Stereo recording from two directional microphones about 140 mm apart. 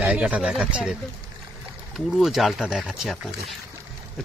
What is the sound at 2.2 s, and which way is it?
Speech, centre (ahead or behind).